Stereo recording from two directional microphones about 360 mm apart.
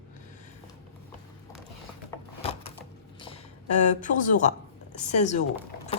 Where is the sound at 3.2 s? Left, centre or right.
Centre.